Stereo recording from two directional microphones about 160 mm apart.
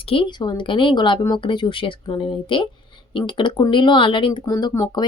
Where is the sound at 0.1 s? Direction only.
30° left (ahead or behind).